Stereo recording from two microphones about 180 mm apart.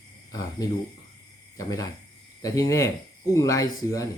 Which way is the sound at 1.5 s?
20° left (ahead or behind).